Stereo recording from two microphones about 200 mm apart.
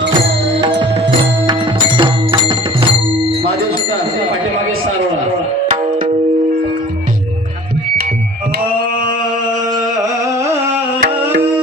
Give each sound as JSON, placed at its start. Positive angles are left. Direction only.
{"t": 0.6, "sound": "music", "side_deg": -25}
{"t": 5.6, "sound": "music", "side_deg": -35}
{"t": 9.7, "sound": "music", "side_deg": -20}
{"t": 11.0, "sound": "music", "side_deg": -60}